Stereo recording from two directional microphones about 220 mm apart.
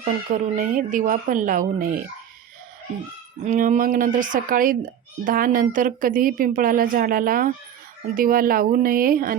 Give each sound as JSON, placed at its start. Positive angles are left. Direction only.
{"t": 0.3, "sound": "a woman's voice", "side_deg": -40}
{"t": 3.4, "sound": "a woman's voice", "side_deg": -35}